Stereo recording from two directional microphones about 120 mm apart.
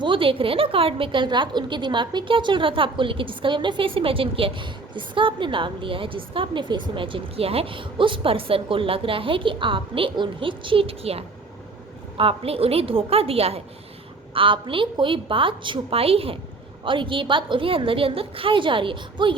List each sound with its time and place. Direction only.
0.0 s a woman's voice: 45° right (ahead or behind)
14.3 s a woman's voice: 45° right (ahead or behind)